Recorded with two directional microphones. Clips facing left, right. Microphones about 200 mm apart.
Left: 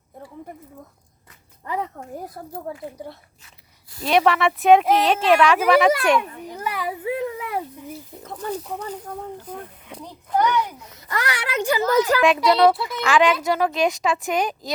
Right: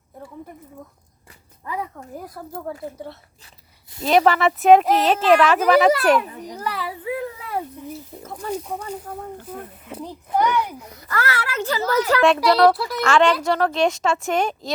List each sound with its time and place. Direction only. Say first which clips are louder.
1.6 s speech: left 2 dB; 25° left (ahead or behind)
3.4 s a sound: right 2 dB; 25° right (ahead or behind)
4.0 s a woman's voice: right 2 dB; centre (ahead or behind)
6.5 s a child's voice: even; 10° left (ahead or behind)
6.8 s a sound: left 2 dB; 25° left (ahead or behind)
9.8 s speech: right 5 dB; 5° right (ahead or behind)
10.9 s a child's voice: right 2 dB; 20° left (ahead or behind)
12.2 s a woman's voice: right 3 dB; centre (ahead or behind)